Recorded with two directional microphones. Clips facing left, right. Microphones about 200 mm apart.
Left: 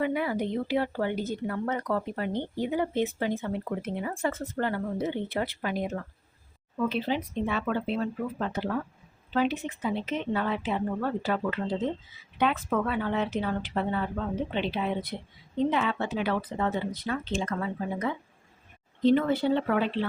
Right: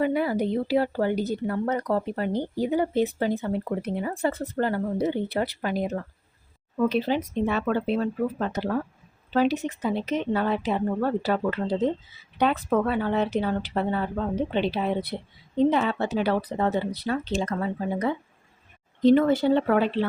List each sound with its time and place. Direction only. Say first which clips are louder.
0.0 s speech: right 4 dB; 35° right (ahead or behind)